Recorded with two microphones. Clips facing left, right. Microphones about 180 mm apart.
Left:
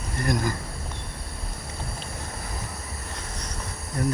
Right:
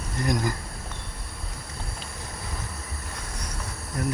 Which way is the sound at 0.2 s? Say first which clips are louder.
Even; 15° right (ahead or behind).